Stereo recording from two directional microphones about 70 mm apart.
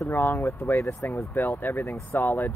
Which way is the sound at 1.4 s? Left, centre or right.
Left.